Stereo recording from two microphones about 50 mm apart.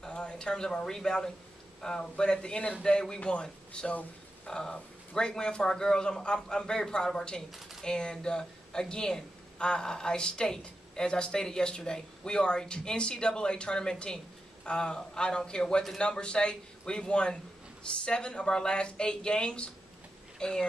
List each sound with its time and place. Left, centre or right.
0.0 s speech: centre